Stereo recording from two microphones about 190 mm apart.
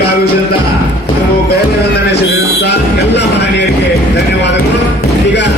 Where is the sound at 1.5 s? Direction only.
60° left (ahead or behind).